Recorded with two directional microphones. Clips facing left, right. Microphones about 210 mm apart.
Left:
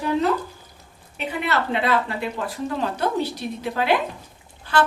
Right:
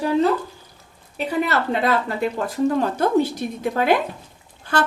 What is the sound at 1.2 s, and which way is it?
Speech, 40° right (ahead or behind).